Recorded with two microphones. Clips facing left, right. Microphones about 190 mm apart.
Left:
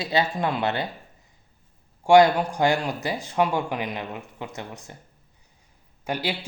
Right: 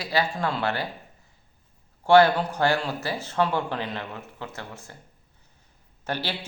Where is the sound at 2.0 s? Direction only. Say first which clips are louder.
Left 1 dB; 15° left (ahead or behind).